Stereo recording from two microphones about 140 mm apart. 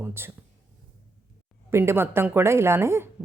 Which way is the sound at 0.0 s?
15° right (ahead or behind).